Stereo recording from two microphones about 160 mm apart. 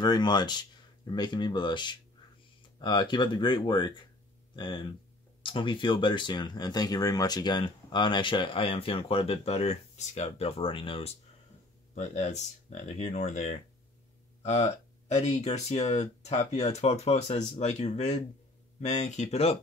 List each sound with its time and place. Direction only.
0.0 s speech: 25° left (ahead or behind)
11.9 s speech: 45° left (ahead or behind)